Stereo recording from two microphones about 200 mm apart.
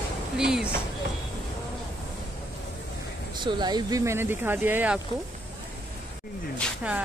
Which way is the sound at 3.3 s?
20° right (ahead or behind).